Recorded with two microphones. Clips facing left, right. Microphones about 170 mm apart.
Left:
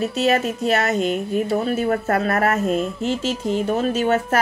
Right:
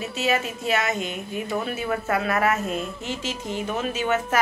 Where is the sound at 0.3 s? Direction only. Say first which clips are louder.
Left 3 dB; 40° left (ahead or behind).